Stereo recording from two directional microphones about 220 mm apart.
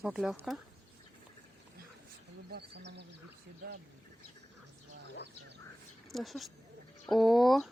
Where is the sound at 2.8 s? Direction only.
50° right (ahead or behind).